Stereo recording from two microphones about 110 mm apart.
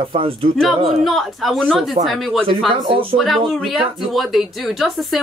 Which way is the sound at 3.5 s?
Centre (ahead or behind).